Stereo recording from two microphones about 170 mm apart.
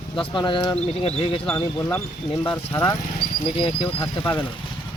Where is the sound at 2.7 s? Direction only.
20° left (ahead or behind).